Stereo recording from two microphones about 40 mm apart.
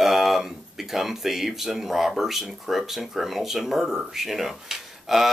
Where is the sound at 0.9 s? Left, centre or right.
Centre.